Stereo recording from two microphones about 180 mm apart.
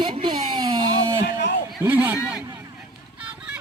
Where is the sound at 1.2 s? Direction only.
65° left (ahead or behind).